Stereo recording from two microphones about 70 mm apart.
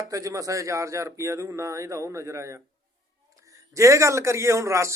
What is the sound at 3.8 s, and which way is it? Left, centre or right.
Speech, right.